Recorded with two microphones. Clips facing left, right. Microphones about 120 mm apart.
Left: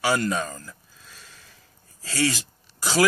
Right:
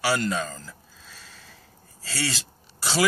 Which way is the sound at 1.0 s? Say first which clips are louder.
Right 1 dB; 10° left (ahead or behind).